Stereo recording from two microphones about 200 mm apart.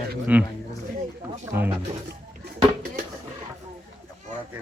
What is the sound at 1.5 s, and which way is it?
Speech, 10° right (ahead or behind).